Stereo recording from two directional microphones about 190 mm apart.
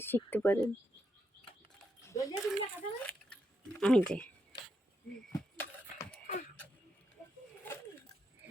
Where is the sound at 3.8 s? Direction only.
5° left (ahead or behind).